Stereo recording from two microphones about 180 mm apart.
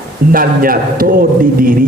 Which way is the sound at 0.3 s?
50° right (ahead or behind).